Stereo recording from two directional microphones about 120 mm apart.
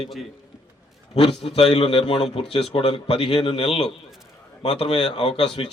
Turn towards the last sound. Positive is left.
turn(degrees=45)  # may be behind; listen again after turning